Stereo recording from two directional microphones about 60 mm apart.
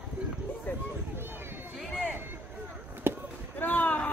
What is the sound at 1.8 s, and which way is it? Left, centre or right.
Music, centre.